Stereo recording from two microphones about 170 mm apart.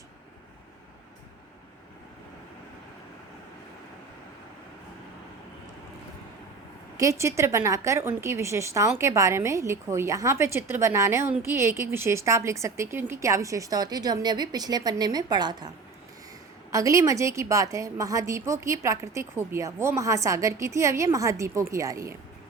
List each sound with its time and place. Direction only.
6.9 s a woman's voice: 20° right (ahead or behind)
16.7 s a woman's voice: 20° right (ahead or behind)